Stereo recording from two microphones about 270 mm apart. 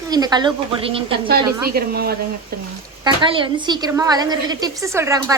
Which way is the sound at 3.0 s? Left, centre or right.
Centre.